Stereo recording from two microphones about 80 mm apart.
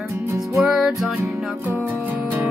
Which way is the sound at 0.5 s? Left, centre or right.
Centre.